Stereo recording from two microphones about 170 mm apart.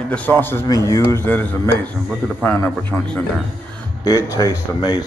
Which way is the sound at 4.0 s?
20° left (ahead or behind).